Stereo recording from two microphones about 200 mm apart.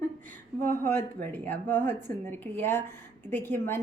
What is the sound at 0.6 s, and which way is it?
Speech, 10° left (ahead or behind).